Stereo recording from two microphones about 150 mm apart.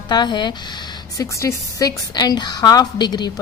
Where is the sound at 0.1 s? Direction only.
30° left (ahead or behind).